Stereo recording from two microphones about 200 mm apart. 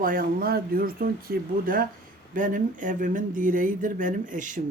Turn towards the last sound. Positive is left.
turn(degrees=-40)  # may be behind; listen again after turning